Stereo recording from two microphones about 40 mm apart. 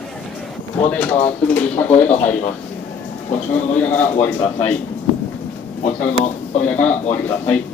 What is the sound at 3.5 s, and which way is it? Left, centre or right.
Speech, left.